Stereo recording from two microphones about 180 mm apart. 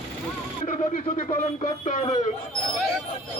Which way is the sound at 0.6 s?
45° left (ahead or behind).